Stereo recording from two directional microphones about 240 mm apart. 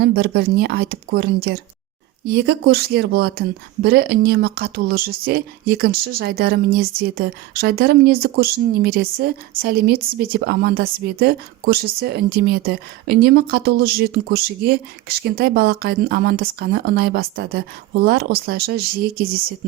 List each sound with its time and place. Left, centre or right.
0.0 s a woman's voice: right